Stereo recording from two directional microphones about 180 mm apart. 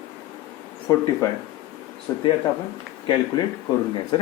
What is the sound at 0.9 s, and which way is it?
Speech, 15° left (ahead or behind).